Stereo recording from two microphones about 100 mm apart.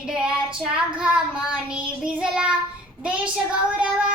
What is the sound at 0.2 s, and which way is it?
Child singing, 10° right (ahead or behind).